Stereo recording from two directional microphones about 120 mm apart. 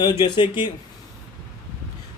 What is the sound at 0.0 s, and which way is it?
Speech, 40° left (ahead or behind).